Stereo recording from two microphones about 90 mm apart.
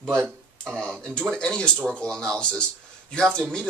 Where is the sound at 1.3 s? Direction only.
10° left (ahead or behind).